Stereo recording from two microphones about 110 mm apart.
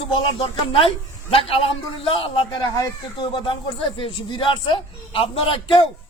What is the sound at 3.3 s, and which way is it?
Speech, 50° left (ahead or behind).